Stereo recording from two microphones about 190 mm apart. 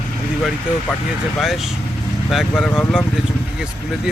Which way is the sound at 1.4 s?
Centre (ahead or behind).